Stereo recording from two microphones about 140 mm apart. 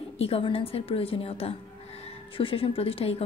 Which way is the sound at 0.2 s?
45° left (ahead or behind).